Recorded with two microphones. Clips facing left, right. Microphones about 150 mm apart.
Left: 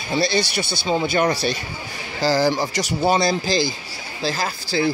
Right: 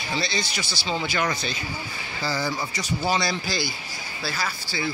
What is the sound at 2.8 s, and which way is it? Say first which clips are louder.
Speech: left 6 dB; 75° left (ahead or behind).